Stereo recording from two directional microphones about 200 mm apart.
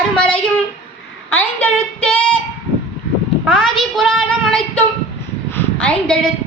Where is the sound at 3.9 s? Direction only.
Centre (ahead or behind).